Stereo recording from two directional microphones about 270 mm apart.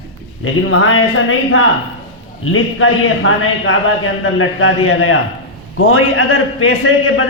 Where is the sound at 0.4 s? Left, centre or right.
Left.